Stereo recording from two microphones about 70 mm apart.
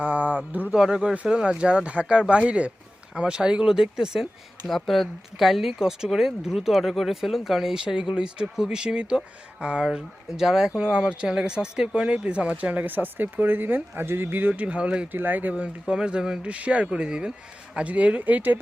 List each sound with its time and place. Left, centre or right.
0.0 s speech: right
0.7 s speech: centre
15.1 s speech: right